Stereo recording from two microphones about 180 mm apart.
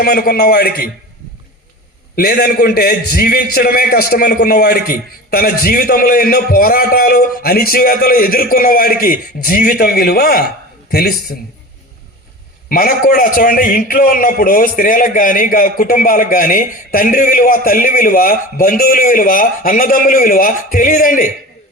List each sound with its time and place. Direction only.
0.0 s a man's voice: 60° left (ahead or behind)
2.1 s a man's voice: 60° left (ahead or behind)
12.6 s a man's voice: 55° left (ahead or behind)